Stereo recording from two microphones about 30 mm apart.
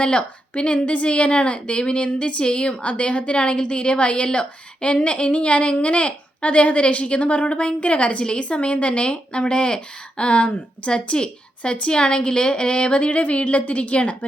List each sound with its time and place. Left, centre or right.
0.0 s a woman's voice: left
2.4 s a woman's voice: left
2.8 s a woman's voice: left